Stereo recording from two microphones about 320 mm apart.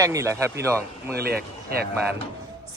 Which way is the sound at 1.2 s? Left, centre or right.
Right.